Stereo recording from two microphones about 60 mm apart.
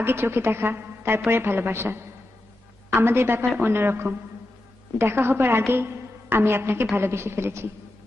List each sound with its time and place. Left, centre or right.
0.0 s a woman's voice: right